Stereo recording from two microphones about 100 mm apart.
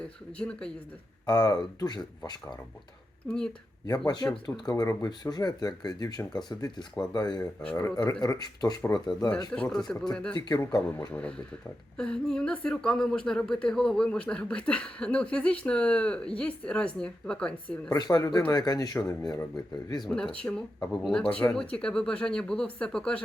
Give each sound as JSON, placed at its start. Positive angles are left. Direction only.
{"t": 0.0, "sound": "a woman's voice", "side_deg": 10}
{"t": 1.2, "sound": "speech", "side_deg": 40}
{"t": 3.2, "sound": "a woman's voice", "side_deg": 5}
{"t": 3.8, "sound": "a man's voice", "side_deg": 40}
{"t": 4.7, "sound": "speech", "side_deg": 30}
{"t": 9.5, "sound": "a woman's voice", "side_deg": 10}
{"t": 10.3, "sound": "a man's voice", "side_deg": 45}
{"t": 11.1, "sound": "a woman's voice", "side_deg": 10}
{"t": 17.8, "sound": "speech", "side_deg": 40}
{"t": 20.1, "sound": "a woman's voice", "side_deg": 10}